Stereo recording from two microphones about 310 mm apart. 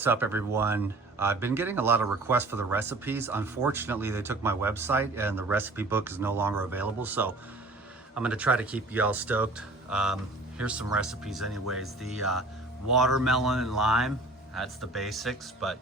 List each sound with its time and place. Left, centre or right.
0.0 s speech: centre
11.3 s speech: right
11.7 s speech: centre